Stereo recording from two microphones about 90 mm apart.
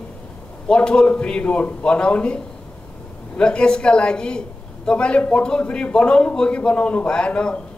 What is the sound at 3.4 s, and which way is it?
Speech, 10° left (ahead or behind).